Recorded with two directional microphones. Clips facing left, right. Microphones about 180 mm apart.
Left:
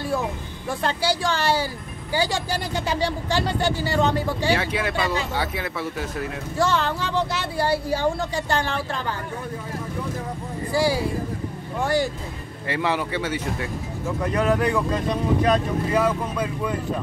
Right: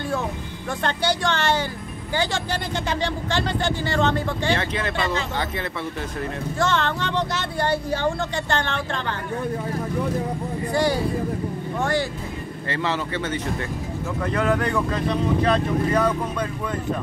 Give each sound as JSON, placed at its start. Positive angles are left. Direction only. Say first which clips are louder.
{"t": 0.0, "sound": "speech", "louder": "left 1 dB", "side_deg": 10}
{"t": 10.7, "sound": "speech", "louder": "even", "side_deg": 5}